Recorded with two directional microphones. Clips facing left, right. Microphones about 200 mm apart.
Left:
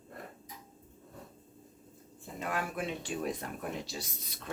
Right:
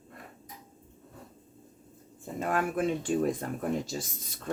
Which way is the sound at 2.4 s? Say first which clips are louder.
Right 7 dB; 50° right (ahead or behind).